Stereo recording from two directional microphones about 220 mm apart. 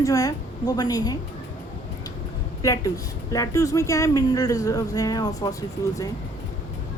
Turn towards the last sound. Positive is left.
turn(degrees=15)  # may be behind; listen again after turning